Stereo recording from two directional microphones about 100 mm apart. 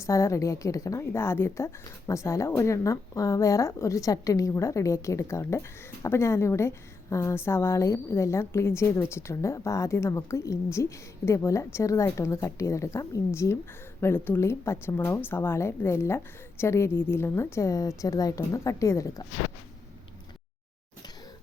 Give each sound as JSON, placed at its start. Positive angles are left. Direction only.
{"t": 0.0, "sound": "a woman's voice", "side_deg": 30}